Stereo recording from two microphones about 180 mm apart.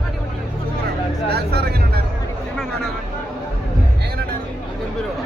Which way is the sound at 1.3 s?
60° right (ahead or behind).